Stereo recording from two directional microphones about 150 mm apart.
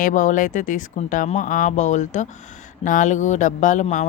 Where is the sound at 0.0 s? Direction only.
60° left (ahead or behind).